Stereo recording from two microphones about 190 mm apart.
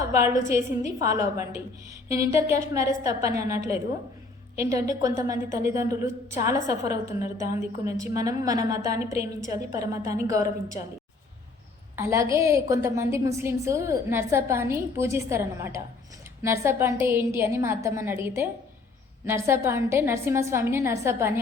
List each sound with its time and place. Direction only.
0.2 s a woman's voice: 15° right (ahead or behind)
11.9 s a woman's voice: 15° right (ahead or behind)